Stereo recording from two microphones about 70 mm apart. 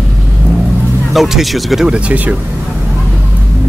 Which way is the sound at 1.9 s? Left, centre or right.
Centre.